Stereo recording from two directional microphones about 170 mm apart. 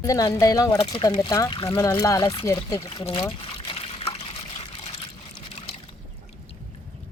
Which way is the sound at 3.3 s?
30° left (ahead or behind).